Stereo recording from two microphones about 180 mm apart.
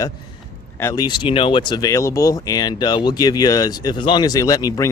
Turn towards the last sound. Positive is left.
turn(degrees=20)  # may be behind; listen again after turning